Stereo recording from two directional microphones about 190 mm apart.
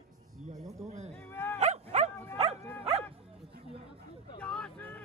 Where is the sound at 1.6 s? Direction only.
35° right (ahead or behind).